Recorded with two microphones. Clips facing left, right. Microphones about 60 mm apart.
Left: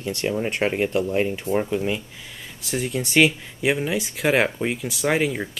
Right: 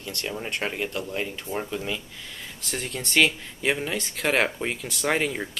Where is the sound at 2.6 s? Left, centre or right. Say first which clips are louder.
Left 7 dB; centre.